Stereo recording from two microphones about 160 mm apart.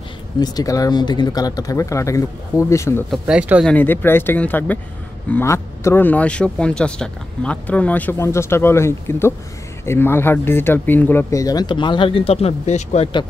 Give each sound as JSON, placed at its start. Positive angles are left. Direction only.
{"t": 0.4, "sound": "speech", "side_deg": 25}
{"t": 3.1, "sound": "speech", "side_deg": -5}
{"t": 3.6, "sound": "speech", "side_deg": 10}